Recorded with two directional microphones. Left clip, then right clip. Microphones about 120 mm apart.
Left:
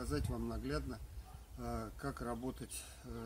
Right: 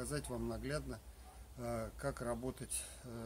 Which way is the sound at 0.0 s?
20° right (ahead or behind).